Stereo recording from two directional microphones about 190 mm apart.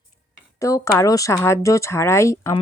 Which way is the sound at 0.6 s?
15° left (ahead or behind).